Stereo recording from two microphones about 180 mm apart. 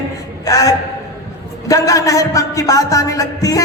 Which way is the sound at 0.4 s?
20° left (ahead or behind).